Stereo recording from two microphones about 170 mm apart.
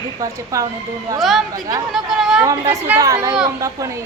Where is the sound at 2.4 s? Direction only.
15° right (ahead or behind).